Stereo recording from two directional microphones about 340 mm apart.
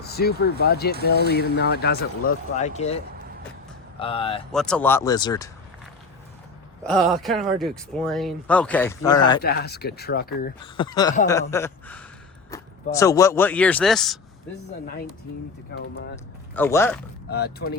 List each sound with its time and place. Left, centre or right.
0.0 s speech: left
4.5 s speech: centre
6.8 s speech: centre
9.4 s speech: left
10.6 s speech: centre
15.8 s speech: left
16.1 s speech: centre
17.2 s speech: left